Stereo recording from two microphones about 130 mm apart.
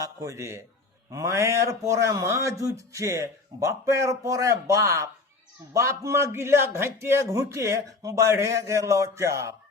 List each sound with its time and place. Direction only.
0.0 s a man's voice: 25° right (ahead or behind)